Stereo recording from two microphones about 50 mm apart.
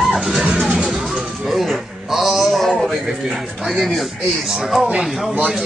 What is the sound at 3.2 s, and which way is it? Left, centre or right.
Speech, centre.